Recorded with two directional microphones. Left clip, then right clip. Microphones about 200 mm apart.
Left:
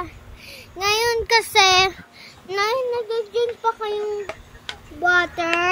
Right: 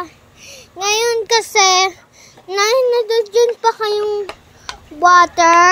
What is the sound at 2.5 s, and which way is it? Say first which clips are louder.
A child's voice: right 8 dB; 10° right (ahead or behind).